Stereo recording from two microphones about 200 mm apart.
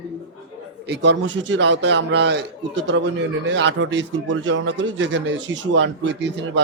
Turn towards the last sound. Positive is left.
turn(degrees=-60)  # may be behind; listen again after turning